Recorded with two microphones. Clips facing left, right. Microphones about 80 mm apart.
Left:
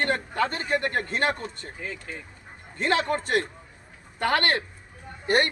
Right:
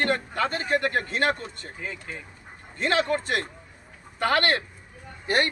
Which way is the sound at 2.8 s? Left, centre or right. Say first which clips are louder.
Even; left.